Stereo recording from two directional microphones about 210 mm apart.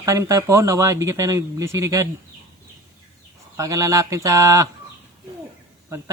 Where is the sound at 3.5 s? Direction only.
15° right (ahead or behind).